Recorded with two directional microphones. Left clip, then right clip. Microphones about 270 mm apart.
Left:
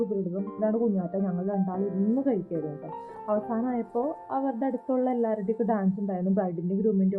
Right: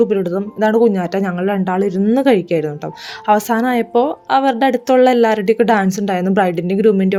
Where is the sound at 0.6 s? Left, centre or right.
Right.